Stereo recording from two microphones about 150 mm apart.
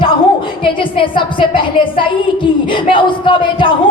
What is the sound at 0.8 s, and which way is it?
Speech, 35° left (ahead or behind).